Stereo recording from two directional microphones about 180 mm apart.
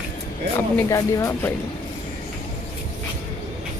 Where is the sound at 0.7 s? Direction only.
15° left (ahead or behind).